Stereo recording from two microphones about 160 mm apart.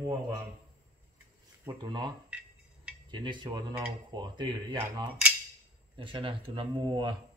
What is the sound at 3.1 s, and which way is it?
Speech, 30° right (ahead or behind).